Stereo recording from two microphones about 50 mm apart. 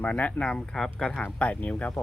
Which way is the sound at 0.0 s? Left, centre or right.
Left.